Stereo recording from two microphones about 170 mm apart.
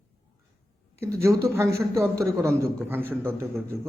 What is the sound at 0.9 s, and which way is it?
A man's voice, 15° right (ahead or behind).